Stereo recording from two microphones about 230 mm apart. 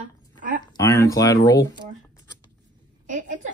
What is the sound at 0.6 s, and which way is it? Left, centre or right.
Speech, centre.